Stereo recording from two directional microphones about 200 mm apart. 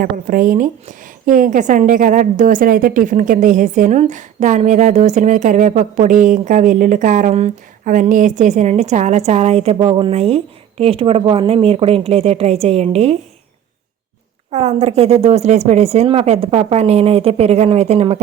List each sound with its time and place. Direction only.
0.0 s a woman's voice: 45° right (ahead or behind)
14.5 s a woman's voice: 35° right (ahead or behind)